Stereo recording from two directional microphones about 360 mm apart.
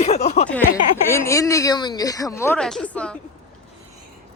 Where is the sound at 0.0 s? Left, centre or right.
Centre.